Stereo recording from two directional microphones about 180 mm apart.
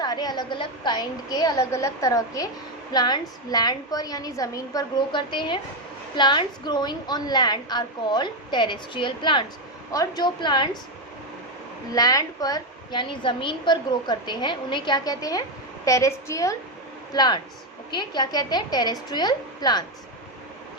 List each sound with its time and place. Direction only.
0.0 s a woman's voice: 20° left (ahead or behind)
11.9 s a woman's voice: 20° left (ahead or behind)